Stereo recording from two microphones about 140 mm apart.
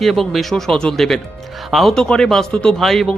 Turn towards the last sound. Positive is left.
turn(degrees=0)  # may be behind; listen again after turning